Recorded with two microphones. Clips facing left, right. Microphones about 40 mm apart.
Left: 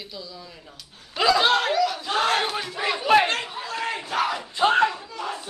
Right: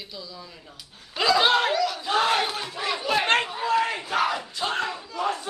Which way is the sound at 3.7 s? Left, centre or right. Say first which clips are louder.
Right 1 dB; centre.